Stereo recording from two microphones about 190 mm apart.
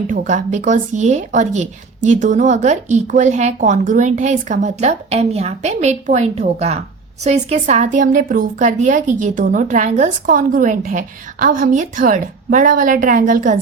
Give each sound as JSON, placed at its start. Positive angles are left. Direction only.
{"t": 0.1, "sound": "a woman's voice", "side_deg": -40}